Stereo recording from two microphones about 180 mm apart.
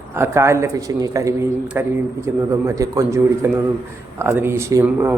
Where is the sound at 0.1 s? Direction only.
15° right (ahead or behind).